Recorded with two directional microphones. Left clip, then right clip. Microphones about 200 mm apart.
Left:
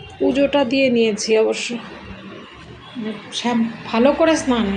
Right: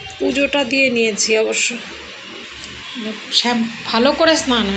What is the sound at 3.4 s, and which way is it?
Speech, centre (ahead or behind).